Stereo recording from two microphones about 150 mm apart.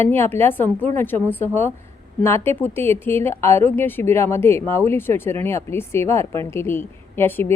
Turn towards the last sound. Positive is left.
turn(degrees=15)  # may be behind; listen again after turning